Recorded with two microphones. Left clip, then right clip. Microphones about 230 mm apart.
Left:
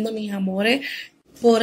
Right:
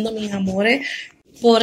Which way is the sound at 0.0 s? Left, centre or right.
Centre.